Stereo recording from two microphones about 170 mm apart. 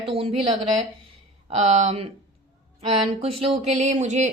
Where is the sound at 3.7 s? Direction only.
40° right (ahead or behind).